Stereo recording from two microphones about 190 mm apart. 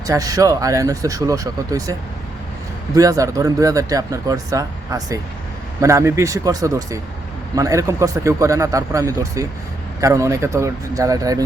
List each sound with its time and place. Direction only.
0.1 s speech: 20° right (ahead or behind)